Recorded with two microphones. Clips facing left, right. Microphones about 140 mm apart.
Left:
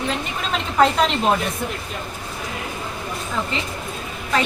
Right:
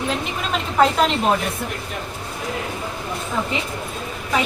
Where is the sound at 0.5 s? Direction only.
Centre (ahead or behind).